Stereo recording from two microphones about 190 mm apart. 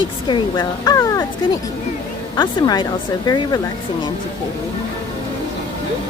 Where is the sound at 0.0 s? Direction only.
25° left (ahead or behind).